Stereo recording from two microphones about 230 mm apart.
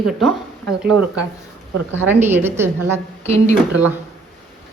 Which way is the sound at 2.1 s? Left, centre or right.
Centre.